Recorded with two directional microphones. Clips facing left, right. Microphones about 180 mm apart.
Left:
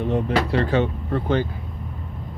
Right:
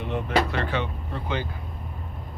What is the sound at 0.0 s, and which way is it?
Speech, 35° left (ahead or behind).